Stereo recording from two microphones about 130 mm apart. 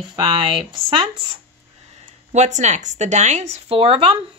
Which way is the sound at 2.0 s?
60° right (ahead or behind).